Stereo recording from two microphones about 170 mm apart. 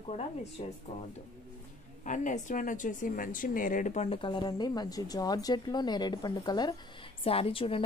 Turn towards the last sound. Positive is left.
turn(degrees=30)  # may be behind; listen again after turning